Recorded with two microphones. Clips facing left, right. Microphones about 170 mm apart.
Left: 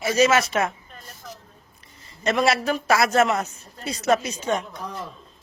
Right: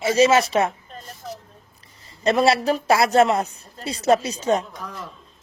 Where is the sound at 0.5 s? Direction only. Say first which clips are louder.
Right 3 dB; 35° right (ahead or behind).